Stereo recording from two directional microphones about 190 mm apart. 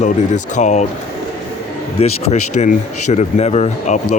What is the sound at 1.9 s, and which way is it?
Speech, 35° left (ahead or behind).